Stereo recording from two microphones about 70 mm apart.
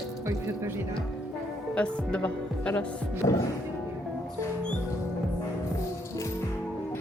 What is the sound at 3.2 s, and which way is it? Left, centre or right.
Music, left.